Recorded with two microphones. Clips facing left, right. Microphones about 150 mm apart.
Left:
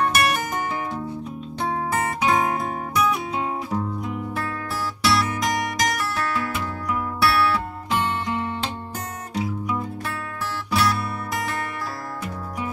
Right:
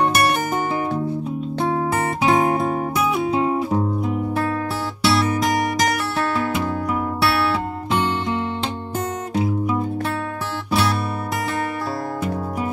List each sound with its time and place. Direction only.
0.0 s music: 30° right (ahead or behind)
2.2 s music: 25° right (ahead or behind)
10.7 s music: 25° right (ahead or behind)